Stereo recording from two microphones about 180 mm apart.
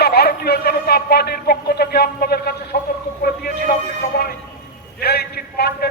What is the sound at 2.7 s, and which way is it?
A man's voice, 50° left (ahead or behind).